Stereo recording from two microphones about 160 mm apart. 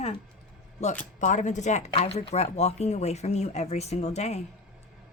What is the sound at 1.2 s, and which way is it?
Speech, 50° left (ahead or behind).